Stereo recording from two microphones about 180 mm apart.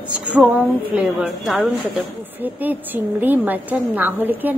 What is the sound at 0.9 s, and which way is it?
A woman's voice, 5° right (ahead or behind).